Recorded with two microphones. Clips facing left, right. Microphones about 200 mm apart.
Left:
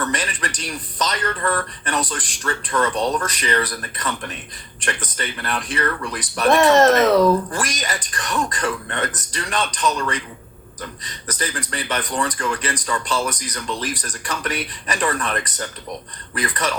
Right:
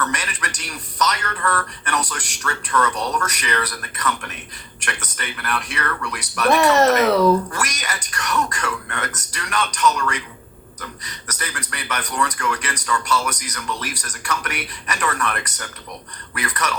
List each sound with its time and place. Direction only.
0.0 s speech: 30° left (ahead or behind)
7.5 s speech: 30° left (ahead or behind)